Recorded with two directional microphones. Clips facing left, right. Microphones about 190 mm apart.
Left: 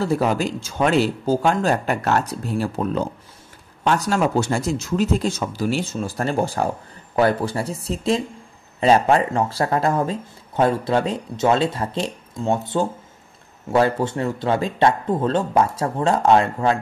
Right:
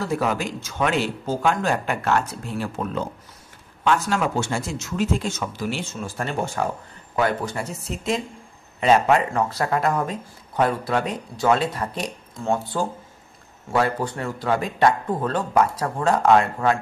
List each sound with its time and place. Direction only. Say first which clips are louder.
0.0 s a man's voice: left 4 dB; 35° left (ahead or behind)